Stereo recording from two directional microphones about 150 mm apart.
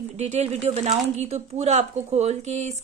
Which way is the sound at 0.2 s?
45° right (ahead or behind).